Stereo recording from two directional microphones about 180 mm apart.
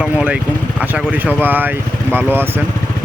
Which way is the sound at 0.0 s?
5° right (ahead or behind).